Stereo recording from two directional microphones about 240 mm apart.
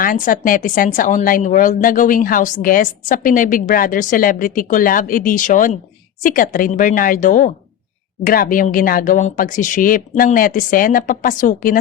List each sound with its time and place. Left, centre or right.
0.0 s a woman's voice: left